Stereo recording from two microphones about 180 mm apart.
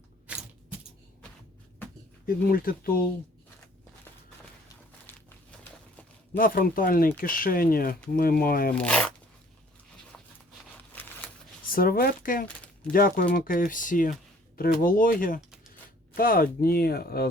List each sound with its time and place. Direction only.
0.3 s a sound: 5° right (ahead or behind)
2.2 s speech: 55° left (ahead or behind)
6.3 s speech: 55° left (ahead or behind)
8.7 s speech: 5° left (ahead or behind)
10.9 s a sound: 10° left (ahead or behind)
11.7 s speech: 55° left (ahead or behind)